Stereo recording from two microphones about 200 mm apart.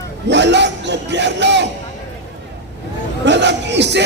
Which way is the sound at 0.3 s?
60° right (ahead or behind).